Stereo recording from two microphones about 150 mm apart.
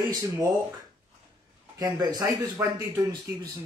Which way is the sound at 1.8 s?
25° right (ahead or behind).